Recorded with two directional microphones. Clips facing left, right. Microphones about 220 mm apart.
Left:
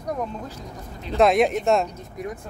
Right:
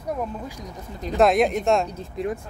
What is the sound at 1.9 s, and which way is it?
Speech, 30° right (ahead or behind).